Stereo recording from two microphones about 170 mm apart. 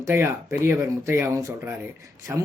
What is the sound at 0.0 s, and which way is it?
Speech, 15° right (ahead or behind).